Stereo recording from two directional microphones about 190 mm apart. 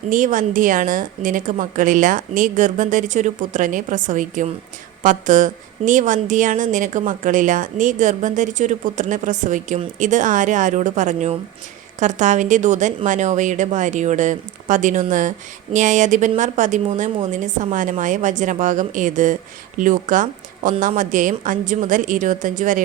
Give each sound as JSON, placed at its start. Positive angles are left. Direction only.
{"t": 0.1, "sound": "a woman's voice", "side_deg": -45}